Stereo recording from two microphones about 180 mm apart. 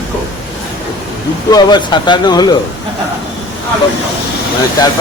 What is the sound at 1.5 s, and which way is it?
A man's voice, 25° left (ahead or behind).